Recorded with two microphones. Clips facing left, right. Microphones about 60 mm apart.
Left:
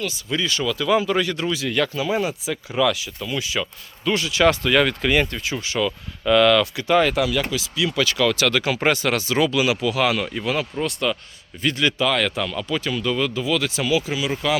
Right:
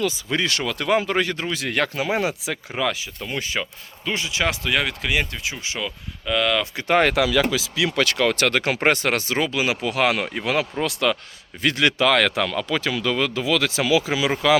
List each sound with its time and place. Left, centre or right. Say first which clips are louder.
0.3 s speech: right 1 dB; right
0.6 s speech: left 4 dB; right
1.5 s speech: left 1 dB; right
2.7 s speech: left 5 dB; right
4.0 s speech: left 4 dB; right
4.4 s speech: left 7 dB; centre
5.5 s speech: left 9 dB; centre
6.2 s speech: left 6 dB; centre
6.7 s speech: even; right
9.9 s speech: even; right